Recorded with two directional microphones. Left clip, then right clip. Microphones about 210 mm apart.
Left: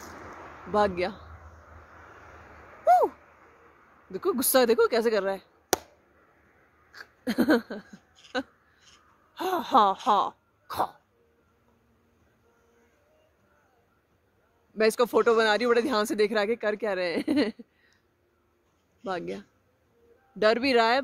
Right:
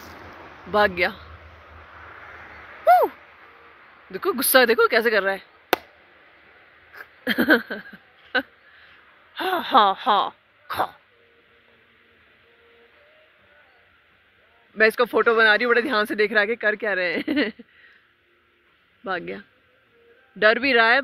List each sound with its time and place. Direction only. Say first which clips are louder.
0.0 s a sound: right 2 dB; 30° right (ahead or behind)
0.7 s speech: right 6 dB; 5° left (ahead or behind)
2.0 s owl: right 10 dB; 20° right (ahead or behind)
4.1 s speech: right 6 dB; 5° left (ahead or behind)
7.2 s a sound: right 6 dB; 10° left (ahead or behind)
9.3 s speech: right 4 dB; 10° left (ahead or behind)
14.8 s speech: right 4 dB; 10° left (ahead or behind)
19.0 s speech: right 4 dB; 10° left (ahead or behind)